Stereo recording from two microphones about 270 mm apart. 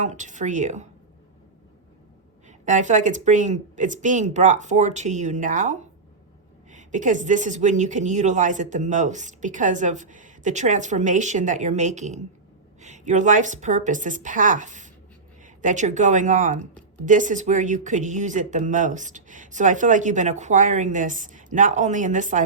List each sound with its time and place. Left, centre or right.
0.0 s speech: right
2.5 s speech: right